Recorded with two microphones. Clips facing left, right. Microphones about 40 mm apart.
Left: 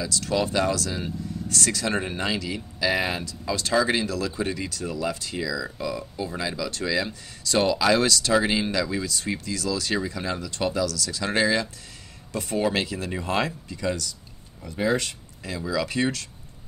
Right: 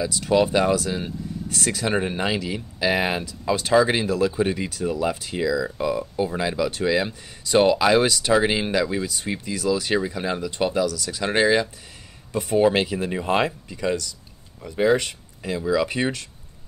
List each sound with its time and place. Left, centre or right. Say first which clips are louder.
0.0 s speech: right 5 dB; right
12.3 s speech: right 6 dB; centre